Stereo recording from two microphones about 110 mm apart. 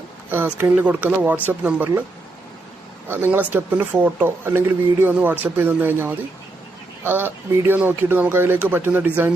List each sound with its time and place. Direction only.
0.3 s speech: 20° right (ahead or behind)
3.1 s speech: 20° right (ahead or behind)